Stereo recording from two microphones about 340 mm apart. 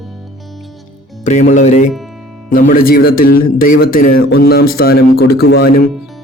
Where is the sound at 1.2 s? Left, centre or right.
Left.